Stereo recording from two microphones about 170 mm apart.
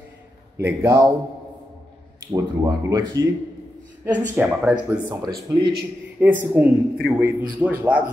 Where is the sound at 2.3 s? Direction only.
20° right (ahead or behind).